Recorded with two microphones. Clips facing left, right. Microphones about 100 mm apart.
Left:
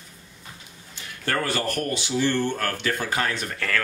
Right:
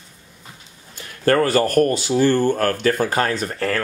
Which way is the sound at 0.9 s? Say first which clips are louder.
Right 10 dB; 45° right (ahead or behind).